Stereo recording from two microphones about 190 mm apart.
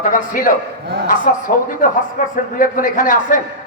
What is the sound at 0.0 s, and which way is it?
A man's voice, 45° left (ahead or behind).